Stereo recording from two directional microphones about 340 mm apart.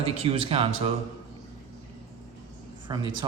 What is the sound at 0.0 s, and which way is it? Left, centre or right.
Speech, centre.